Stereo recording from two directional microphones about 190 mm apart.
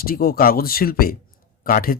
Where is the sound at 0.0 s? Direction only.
50° left (ahead or behind).